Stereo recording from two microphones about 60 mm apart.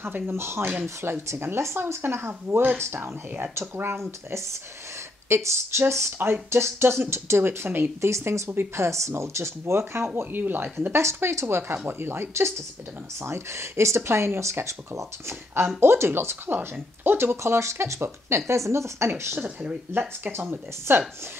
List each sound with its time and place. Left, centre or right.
0.0 s speech: right
8.1 s speech: right
11.0 s speech: right
17.4 s speech: right
19.4 s speech: right
19.9 s speech: right